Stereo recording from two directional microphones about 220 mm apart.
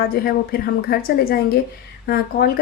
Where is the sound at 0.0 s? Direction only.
40° left (ahead or behind).